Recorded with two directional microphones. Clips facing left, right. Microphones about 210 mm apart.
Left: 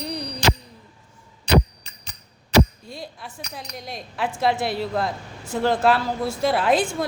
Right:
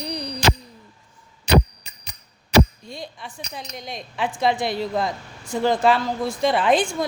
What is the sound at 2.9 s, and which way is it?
A woman's voice, 5° left (ahead or behind).